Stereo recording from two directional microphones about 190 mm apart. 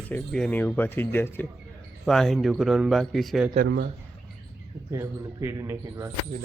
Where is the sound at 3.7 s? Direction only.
60° right (ahead or behind).